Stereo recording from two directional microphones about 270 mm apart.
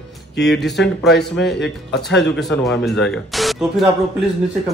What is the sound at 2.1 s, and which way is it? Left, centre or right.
Speech, left.